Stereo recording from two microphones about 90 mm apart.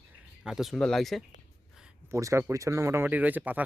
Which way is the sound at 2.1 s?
35° right (ahead or behind).